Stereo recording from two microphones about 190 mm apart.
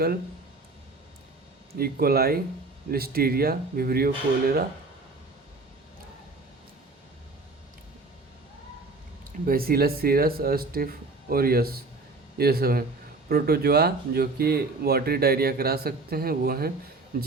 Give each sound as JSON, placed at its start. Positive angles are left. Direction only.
{"t": 1.8, "sound": "speech", "side_deg": -55}
{"t": 9.5, "sound": "speech", "side_deg": -50}